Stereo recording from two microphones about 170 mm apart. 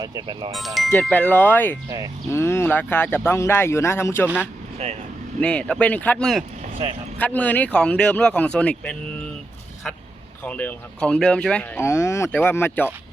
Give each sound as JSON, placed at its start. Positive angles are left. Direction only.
{"t": 0.0, "sound": "speech", "side_deg": -25}
{"t": 0.5, "sound": "speech", "side_deg": 0}
{"t": 5.4, "sound": "speech", "side_deg": 5}
{"t": 10.4, "sound": "speech", "side_deg": 10}